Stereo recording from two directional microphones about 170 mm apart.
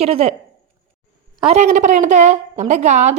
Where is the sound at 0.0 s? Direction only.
35° right (ahead or behind).